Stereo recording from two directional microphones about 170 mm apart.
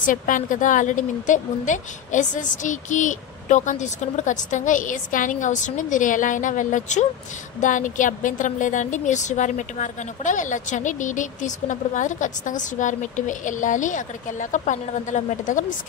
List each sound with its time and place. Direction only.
0.0 s a woman's voice: 50° left (ahead or behind)